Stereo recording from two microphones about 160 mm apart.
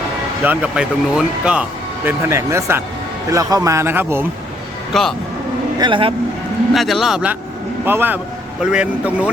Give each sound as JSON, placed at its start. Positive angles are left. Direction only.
{"t": 0.4, "sound": "speech", "side_deg": -10}
{"t": 2.0, "sound": "speech", "side_deg": -15}
{"t": 4.9, "sound": "a man's voice", "side_deg": 0}
{"t": 5.8, "sound": "speech", "side_deg": -30}
{"t": 6.7, "sound": "a man's voice", "side_deg": 0}